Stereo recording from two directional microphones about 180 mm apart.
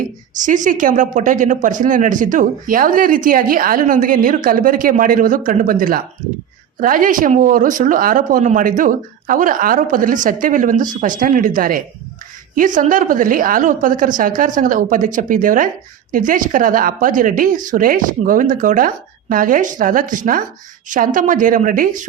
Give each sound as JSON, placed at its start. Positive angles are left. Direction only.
{"t": 0.4, "sound": "speech", "side_deg": -45}